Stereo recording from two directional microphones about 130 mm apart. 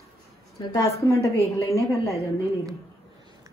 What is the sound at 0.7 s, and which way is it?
Speech, 20° left (ahead or behind).